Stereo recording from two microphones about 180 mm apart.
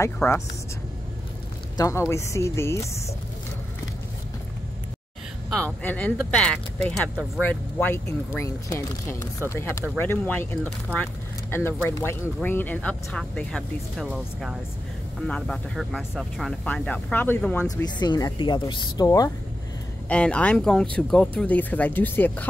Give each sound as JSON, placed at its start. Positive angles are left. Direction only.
{"t": 0.0, "sound": "speech", "side_deg": 15}
{"t": 1.8, "sound": "speech", "side_deg": 15}
{"t": 5.8, "sound": "speech", "side_deg": 10}
{"t": 17.6, "sound": "speech", "side_deg": 20}
{"t": 20.1, "sound": "speech", "side_deg": 5}